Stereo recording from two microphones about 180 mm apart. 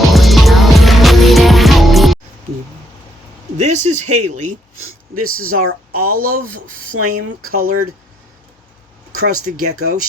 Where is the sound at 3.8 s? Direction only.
40° right (ahead or behind).